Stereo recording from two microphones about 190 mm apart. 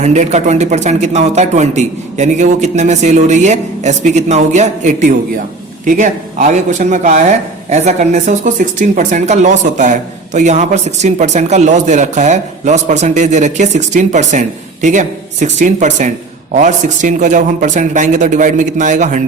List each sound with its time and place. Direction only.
0.0 s a man's voice: 35° right (ahead or behind)